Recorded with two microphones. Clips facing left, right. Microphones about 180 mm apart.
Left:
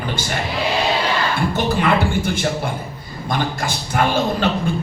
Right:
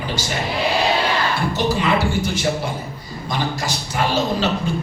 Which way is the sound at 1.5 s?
55° left (ahead or behind).